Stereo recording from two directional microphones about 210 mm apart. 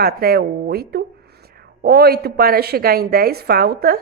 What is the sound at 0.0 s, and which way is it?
A woman's voice, 45° right (ahead or behind).